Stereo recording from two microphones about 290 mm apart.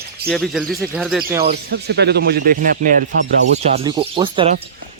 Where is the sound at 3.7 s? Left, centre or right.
Centre.